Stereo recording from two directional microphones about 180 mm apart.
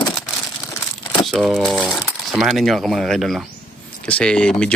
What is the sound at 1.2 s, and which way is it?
Speech, centre (ahead or behind).